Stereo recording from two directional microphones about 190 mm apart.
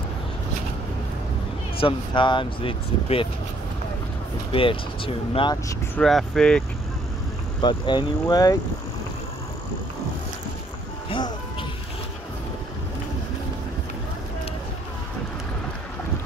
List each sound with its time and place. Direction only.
1.8 s speech: 25° left (ahead or behind)
4.5 s speech: 30° left (ahead or behind)
5.9 s speech: centre (ahead or behind)
7.6 s speech: 25° left (ahead or behind)
11.1 s music: 25° left (ahead or behind)